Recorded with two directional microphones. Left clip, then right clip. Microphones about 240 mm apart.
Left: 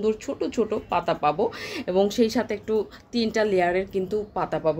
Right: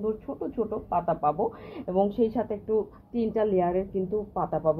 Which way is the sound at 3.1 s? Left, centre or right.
Centre.